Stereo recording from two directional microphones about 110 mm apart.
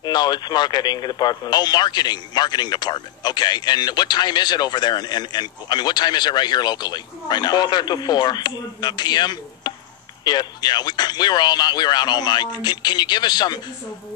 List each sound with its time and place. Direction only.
0.0 s speech: 40° left (ahead or behind)